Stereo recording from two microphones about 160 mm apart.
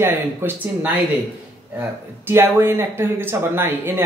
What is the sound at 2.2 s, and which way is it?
Speech, 15° right (ahead or behind).